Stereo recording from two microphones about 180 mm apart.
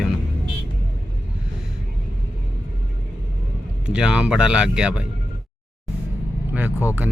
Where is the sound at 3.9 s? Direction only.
5° right (ahead or behind).